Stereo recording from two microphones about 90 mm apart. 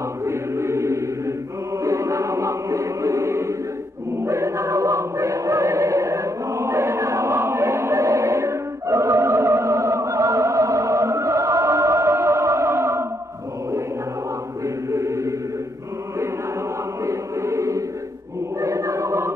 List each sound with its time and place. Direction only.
0.2 s chant: 30° right (ahead or behind)
4.2 s music: 30° right (ahead or behind)
14.9 s chant: 35° right (ahead or behind)
17.0 s chant: 35° right (ahead or behind)
18.6 s choir: 35° right (ahead or behind)